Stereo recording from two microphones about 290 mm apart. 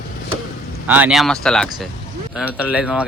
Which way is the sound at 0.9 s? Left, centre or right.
Centre.